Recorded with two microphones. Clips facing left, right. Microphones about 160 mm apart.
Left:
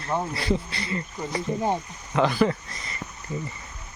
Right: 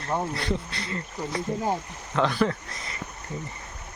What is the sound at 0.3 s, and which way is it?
A man's voice, 5° left (ahead or behind).